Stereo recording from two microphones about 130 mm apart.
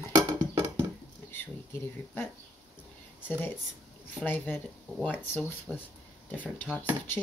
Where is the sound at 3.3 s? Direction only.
15° left (ahead or behind).